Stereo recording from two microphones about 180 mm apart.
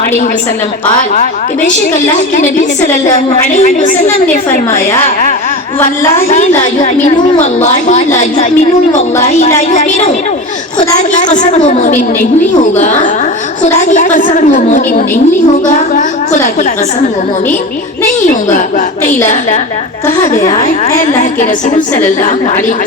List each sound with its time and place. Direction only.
1.1 s a woman's voice: 50° left (ahead or behind)
7.3 s a woman's voice: 40° left (ahead or behind)
11.2 s a woman's voice: 40° left (ahead or behind)
20.4 s a woman's voice: 25° left (ahead or behind)